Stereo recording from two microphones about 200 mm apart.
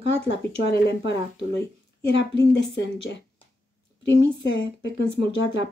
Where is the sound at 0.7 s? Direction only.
60° left (ahead or behind).